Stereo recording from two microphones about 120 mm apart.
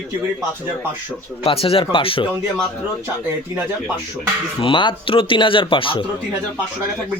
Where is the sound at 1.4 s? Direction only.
50° left (ahead or behind).